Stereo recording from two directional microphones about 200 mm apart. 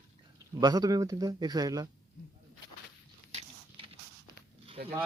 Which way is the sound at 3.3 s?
25° right (ahead or behind).